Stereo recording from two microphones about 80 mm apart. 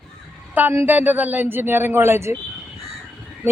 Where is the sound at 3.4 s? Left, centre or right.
Right.